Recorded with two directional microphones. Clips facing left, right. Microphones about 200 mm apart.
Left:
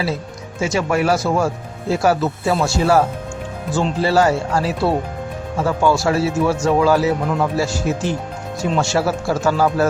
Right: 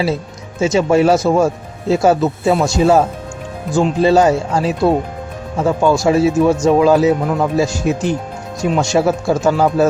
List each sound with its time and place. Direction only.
0.6 s speech: 25° right (ahead or behind)